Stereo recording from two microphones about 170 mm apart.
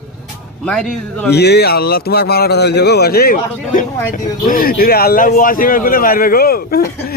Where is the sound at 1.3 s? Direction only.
75° left (ahead or behind).